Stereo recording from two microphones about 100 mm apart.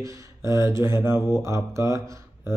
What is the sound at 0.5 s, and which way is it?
Speech, 30° right (ahead or behind).